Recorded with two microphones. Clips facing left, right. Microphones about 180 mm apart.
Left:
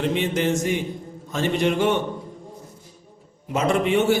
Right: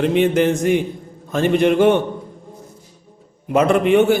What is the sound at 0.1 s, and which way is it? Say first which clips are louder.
A man's voice: right 7 dB; 55° right (ahead or behind).